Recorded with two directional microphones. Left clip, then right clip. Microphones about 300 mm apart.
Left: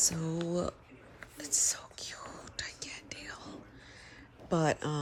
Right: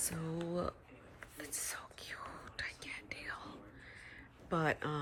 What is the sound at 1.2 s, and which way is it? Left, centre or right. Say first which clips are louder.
Whispering: left 12 dB; centre.